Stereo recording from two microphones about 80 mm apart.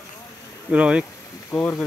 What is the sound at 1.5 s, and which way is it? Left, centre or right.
Speech, left.